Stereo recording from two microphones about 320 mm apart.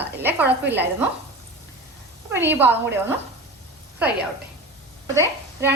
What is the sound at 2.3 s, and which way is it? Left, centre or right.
Speech, centre.